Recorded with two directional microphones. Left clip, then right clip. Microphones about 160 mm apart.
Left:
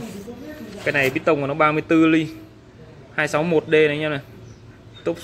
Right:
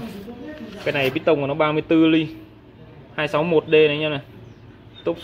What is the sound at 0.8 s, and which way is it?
Speech, centre (ahead or behind).